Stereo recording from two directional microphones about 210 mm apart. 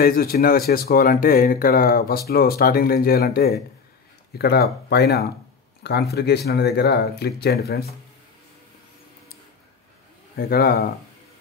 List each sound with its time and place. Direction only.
0.0 s speech: 45° left (ahead or behind)
5.8 s a sound: 50° left (ahead or behind)
6.1 s speech: 50° left (ahead or behind)
10.3 s speech: 45° left (ahead or behind)